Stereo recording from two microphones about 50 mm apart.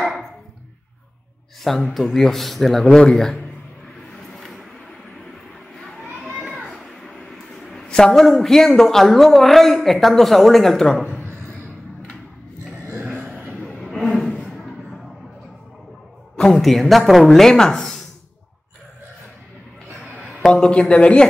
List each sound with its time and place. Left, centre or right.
1.6 s speech: centre
4.2 s vehicle: centre
6.4 s speech: centre
13.7 s a sound: centre
16.3 s a man's voice: centre
16.6 s speech: centre
20.4 s speech: centre